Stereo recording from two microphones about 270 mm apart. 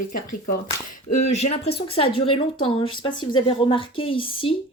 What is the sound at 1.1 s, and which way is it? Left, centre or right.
A woman's voice, left.